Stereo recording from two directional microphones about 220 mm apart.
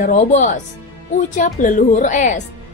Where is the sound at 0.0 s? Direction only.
35° left (ahead or behind).